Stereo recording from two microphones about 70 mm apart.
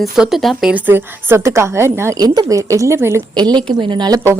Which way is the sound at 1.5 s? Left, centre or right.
Right.